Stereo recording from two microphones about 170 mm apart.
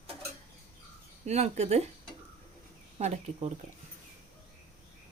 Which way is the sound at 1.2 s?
40° right (ahead or behind).